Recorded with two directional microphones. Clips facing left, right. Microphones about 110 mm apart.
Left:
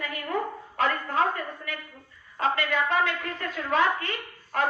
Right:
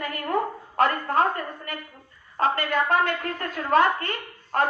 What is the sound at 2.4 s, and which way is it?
A woman's voice, 40° right (ahead or behind).